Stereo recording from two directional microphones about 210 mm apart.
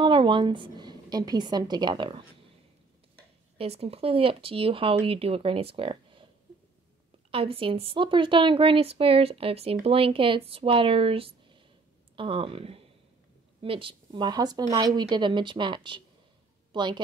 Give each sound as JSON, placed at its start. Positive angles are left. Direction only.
{"t": 0.0, "sound": "a woman's voice", "side_deg": -25}
{"t": 3.5, "sound": "a woman's voice", "side_deg": -30}
{"t": 7.2, "sound": "a woman's voice", "side_deg": -25}